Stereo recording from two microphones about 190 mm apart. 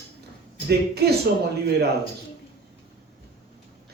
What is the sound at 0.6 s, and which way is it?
Speech, 55° right (ahead or behind).